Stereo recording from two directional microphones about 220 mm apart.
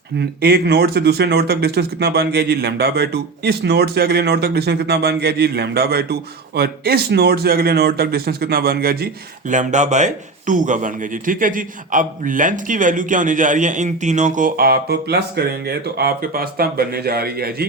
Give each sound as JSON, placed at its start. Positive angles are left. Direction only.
{"t": 0.2, "sound": "speech", "side_deg": -45}
{"t": 9.5, "sound": "a man's voice", "side_deg": -35}